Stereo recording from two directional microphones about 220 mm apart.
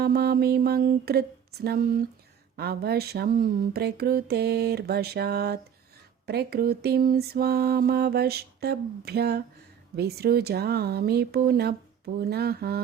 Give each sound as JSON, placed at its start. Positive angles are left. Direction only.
{"t": 0.0, "sound": "mantra", "side_deg": -45}